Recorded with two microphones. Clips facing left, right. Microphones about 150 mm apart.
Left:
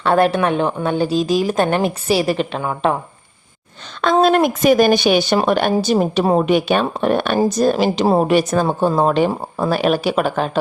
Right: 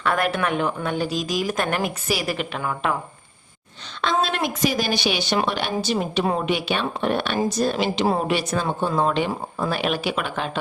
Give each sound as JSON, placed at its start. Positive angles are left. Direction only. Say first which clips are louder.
{"t": 0.0, "sound": "a woman's voice", "louder": "left 7 dB", "side_deg": 30}
{"t": 4.0, "sound": "speech", "louder": "left 9 dB", "side_deg": 45}